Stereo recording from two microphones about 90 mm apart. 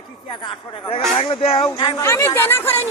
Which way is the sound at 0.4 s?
90° left.